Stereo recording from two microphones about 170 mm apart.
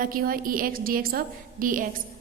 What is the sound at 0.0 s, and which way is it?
A woman's voice, 55° right (ahead or behind).